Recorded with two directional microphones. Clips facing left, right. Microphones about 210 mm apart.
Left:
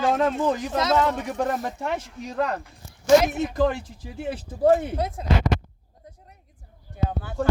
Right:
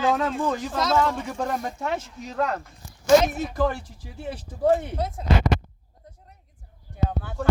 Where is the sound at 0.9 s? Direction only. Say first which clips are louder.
Left 1 dB; 20° left (ahead or behind).